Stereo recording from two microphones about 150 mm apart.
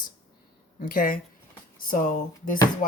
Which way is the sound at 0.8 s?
70° left (ahead or behind).